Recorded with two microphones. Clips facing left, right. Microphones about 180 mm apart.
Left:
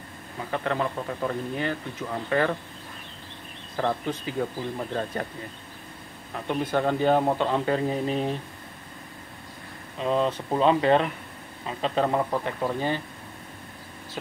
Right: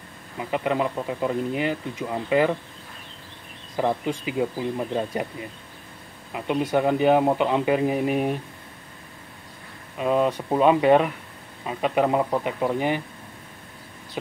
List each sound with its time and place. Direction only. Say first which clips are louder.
0.4 s speech: right 3 dB; 15° right (ahead or behind)
3.7 s speech: right 3 dB; 15° right (ahead or behind)
6.3 s speech: right 3 dB; 15° right (ahead or behind)
9.9 s speech: right 3 dB; 10° right (ahead or behind)
14.2 s speech: right 4 dB; 15° right (ahead or behind)